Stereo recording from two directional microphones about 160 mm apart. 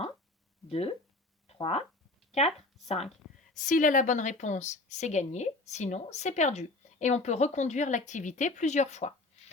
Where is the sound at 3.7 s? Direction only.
55° left (ahead or behind).